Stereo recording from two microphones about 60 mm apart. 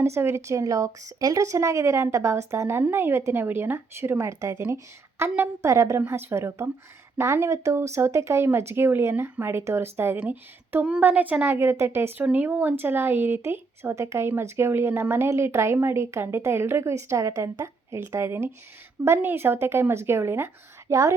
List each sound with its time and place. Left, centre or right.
0.0 s speech: right
4.3 s speech: right
6.1 s a woman's voice: right
11.4 s speech: right
12.2 s speech: right
20.9 s speech: right